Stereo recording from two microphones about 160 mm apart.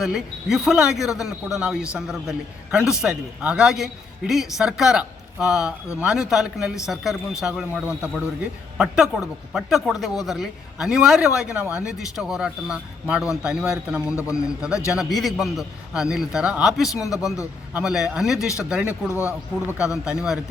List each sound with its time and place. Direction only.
0.0 s a man's voice: centre (ahead or behind)
18.3 s speech: 20° left (ahead or behind)
18.6 s a man's voice: 5° right (ahead or behind)